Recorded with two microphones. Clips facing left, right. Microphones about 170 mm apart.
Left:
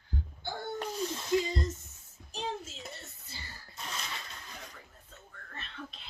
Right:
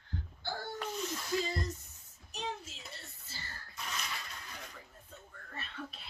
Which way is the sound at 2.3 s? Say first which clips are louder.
Left 3 dB; 30° left (ahead or behind).